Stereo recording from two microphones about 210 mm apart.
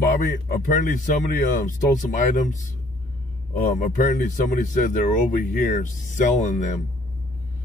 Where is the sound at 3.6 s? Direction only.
35° left (ahead or behind).